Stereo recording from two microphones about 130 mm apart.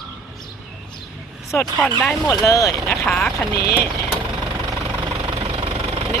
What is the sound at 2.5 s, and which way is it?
Speech, 25° left (ahead or behind).